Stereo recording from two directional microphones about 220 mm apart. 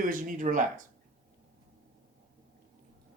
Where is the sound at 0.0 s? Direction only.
35° right (ahead or behind).